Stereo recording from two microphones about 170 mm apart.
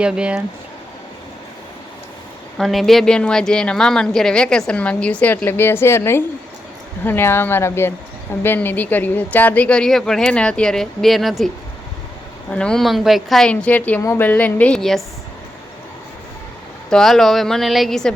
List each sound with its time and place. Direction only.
0.0 s speech: 5° right (ahead or behind)
2.6 s speech: centre (ahead or behind)
16.9 s speech: centre (ahead or behind)